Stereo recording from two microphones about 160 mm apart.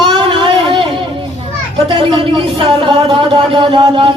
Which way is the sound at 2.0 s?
30° right (ahead or behind).